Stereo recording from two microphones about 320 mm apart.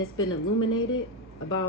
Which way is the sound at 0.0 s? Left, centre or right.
Left.